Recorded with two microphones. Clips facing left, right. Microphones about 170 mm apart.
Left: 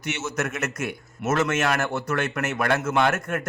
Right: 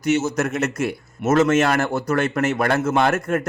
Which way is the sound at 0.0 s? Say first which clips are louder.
Right 8 dB; 35° right (ahead or behind).